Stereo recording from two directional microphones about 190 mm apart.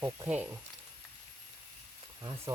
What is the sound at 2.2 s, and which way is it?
Speech, 20° right (ahead or behind).